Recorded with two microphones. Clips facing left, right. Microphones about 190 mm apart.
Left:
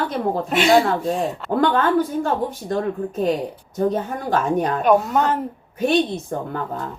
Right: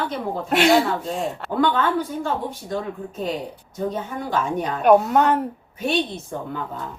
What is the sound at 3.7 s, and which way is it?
A woman's voice, 55° left (ahead or behind).